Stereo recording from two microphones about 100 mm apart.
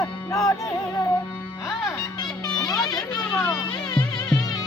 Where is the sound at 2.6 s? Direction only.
40° left (ahead or behind).